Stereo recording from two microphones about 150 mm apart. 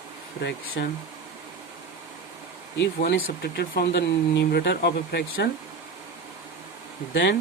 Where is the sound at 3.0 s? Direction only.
90° left.